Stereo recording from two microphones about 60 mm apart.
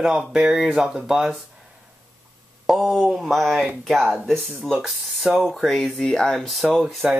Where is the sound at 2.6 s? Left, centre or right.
Centre.